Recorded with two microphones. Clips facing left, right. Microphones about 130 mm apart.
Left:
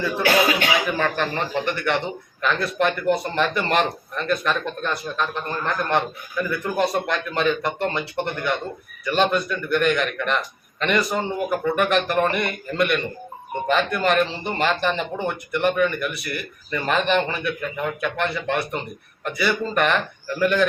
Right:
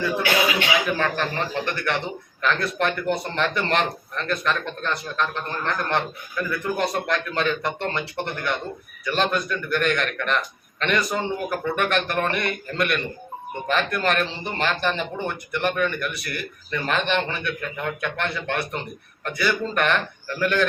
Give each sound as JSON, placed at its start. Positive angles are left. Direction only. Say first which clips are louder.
{"t": 0.2, "sound": "speech", "louder": "left 6 dB", "side_deg": 40}
{"t": 0.9, "sound": "a man's voice", "louder": "left 1 dB", "side_deg": 0}